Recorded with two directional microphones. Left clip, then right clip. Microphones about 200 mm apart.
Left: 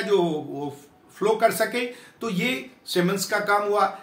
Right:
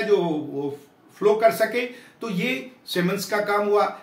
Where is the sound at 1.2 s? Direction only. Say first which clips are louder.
Right 2 dB; 20° left (ahead or behind).